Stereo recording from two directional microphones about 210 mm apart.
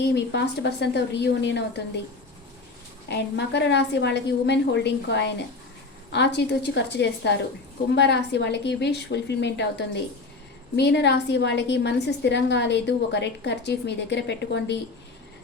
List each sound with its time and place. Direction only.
0.0 s a woman's voice: 55° left (ahead or behind)
3.1 s a woman's voice: 55° left (ahead or behind)